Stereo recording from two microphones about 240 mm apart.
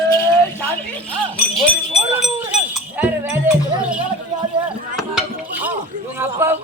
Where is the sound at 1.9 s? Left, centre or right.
Centre.